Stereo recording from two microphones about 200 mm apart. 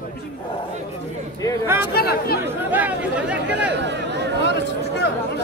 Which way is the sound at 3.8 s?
60° right (ahead or behind).